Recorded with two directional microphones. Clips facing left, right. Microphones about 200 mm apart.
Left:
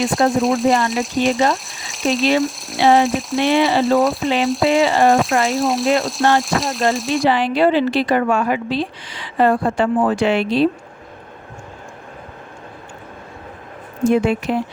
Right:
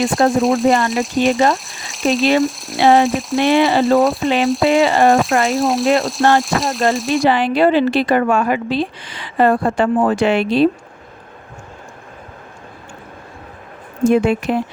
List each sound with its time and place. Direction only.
0.0 s speech: centre (ahead or behind)
7.3 s a woman's voice: 55° right (ahead or behind)
14.1 s a woman's voice: 55° right (ahead or behind)